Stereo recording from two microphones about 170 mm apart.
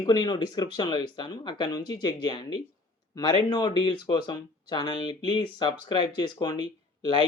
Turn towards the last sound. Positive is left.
turn(degrees=25)  # may be behind; listen again after turning